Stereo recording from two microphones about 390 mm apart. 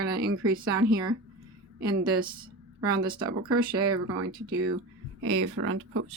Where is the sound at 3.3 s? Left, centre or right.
Right.